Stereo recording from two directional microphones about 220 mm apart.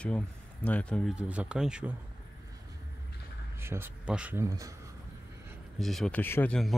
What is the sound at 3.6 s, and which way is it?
Speech, 10° right (ahead or behind).